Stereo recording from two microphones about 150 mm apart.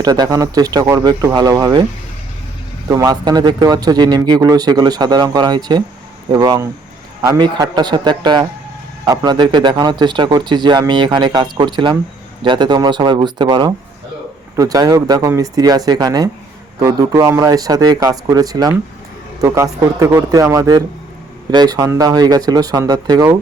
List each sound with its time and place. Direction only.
0.0 s speech: 25° right (ahead or behind)
2.9 s speech: 20° right (ahead or behind)